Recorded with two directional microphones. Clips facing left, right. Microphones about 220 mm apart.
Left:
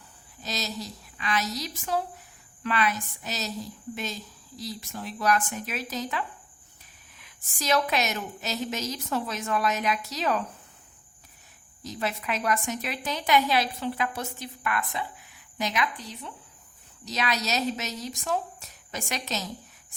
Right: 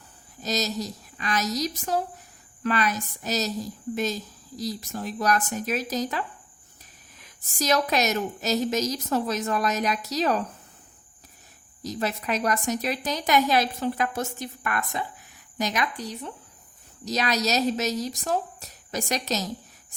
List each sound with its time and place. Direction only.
0.4 s a woman's voice: 40° right (ahead or behind)
11.8 s a woman's voice: 40° right (ahead or behind)